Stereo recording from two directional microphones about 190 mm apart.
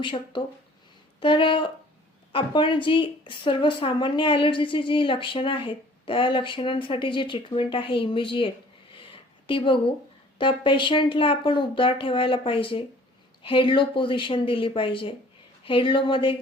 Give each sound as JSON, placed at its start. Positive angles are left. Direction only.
{"t": 0.0, "sound": "speech", "side_deg": 25}
{"t": 9.0, "sound": "a sound", "side_deg": 30}
{"t": 10.3, "sound": "speech", "side_deg": 25}